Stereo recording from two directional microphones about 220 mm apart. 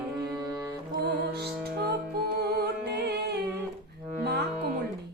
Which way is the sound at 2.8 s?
50° right (ahead or behind).